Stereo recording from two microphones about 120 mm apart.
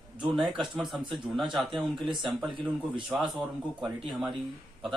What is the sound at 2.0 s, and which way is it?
Speech, 40° right (ahead or behind).